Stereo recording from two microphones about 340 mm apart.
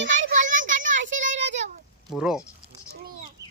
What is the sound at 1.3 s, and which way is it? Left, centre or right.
Child singing, right.